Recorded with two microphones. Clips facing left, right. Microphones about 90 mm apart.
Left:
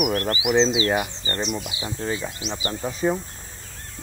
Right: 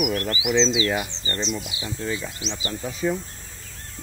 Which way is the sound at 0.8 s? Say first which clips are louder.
Left 2 dB; 25° left (ahead or behind).